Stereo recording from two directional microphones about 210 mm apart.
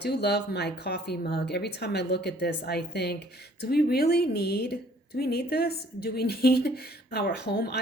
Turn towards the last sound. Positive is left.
turn(degrees=50)  # may be behind; listen again after turning